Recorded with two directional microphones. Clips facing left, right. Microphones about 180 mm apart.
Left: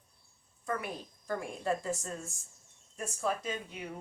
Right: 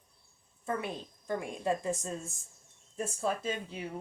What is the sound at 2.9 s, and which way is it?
Speech, 30° right (ahead or behind).